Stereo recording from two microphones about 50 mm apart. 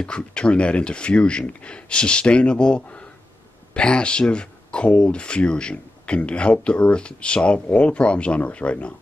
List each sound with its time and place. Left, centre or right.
0.0 s speech: centre